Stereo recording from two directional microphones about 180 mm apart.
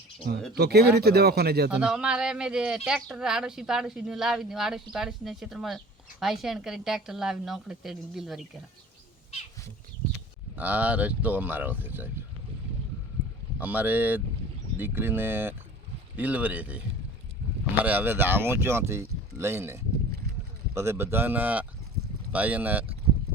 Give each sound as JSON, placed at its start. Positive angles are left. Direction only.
{"t": 0.5, "sound": "speech", "side_deg": -65}
{"t": 1.7, "sound": "speech", "side_deg": -5}
{"t": 10.5, "sound": "speech", "side_deg": -10}
{"t": 13.6, "sound": "speech", "side_deg": -10}
{"t": 17.8, "sound": "speech", "side_deg": -10}